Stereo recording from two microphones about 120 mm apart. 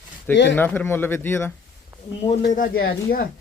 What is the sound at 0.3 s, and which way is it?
Speech, 15° left (ahead or behind).